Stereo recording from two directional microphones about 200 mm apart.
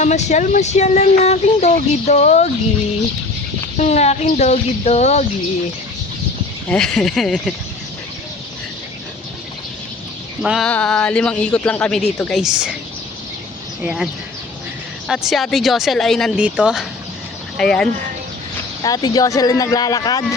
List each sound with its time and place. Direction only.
0.0 s speech: 35° left (ahead or behind)
3.8 s speech: 35° left (ahead or behind)
6.7 s a man's voice: 5° left (ahead or behind)
10.4 s a man's voice: centre (ahead or behind)
13.8 s a man's voice: 5° right (ahead or behind)
18.8 s speech: 20° left (ahead or behind)